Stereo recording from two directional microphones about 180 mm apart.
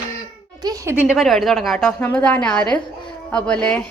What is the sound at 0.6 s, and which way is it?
A woman's voice, 20° right (ahead or behind).